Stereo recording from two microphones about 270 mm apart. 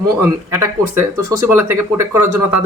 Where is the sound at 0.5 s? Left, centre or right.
Centre.